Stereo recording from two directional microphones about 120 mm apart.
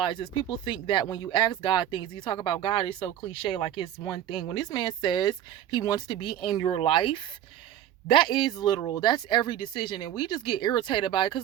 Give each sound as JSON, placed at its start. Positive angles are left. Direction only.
{"t": 0.0, "sound": "speech", "side_deg": 45}